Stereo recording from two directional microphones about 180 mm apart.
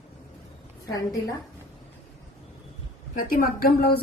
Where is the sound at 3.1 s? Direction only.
55° left (ahead or behind).